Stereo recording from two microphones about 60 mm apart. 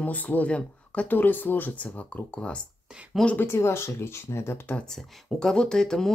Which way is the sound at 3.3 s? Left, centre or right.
Left.